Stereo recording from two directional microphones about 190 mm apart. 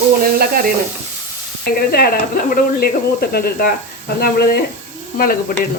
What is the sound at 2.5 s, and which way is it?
Speech, 50° left (ahead or behind).